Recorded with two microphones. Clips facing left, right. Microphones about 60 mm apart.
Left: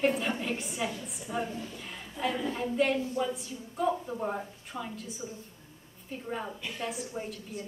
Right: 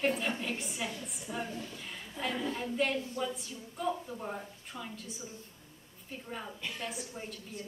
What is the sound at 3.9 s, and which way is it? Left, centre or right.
Speech, centre.